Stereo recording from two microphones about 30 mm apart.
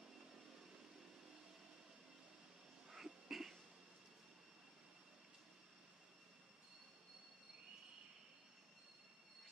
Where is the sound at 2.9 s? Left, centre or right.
Centre.